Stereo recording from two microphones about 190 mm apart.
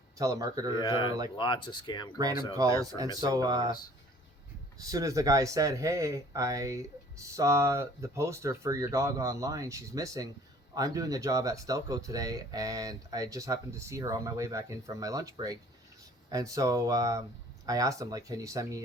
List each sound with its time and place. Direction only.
0.2 s speech: 20° right (ahead or behind)
0.7 s speech: 25° left (ahead or behind)
2.5 s speech: 20° right (ahead or behind)
3.7 s speech: 20° left (ahead or behind)
4.8 s speech: 20° right (ahead or behind)